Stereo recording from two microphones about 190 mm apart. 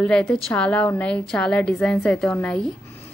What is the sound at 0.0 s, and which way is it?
A woman's voice, 5° left (ahead or behind).